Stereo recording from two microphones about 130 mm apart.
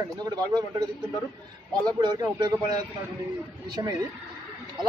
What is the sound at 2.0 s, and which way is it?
A woman's voice, 35° right (ahead or behind).